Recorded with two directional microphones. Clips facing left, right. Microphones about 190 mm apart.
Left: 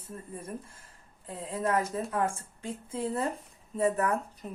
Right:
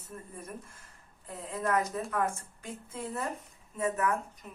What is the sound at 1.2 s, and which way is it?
Speech, 30° left (ahead or behind).